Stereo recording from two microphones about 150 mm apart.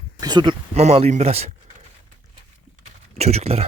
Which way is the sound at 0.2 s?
30° right (ahead or behind).